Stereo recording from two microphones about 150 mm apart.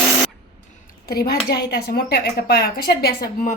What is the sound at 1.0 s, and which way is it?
A woman's voice, 90° left.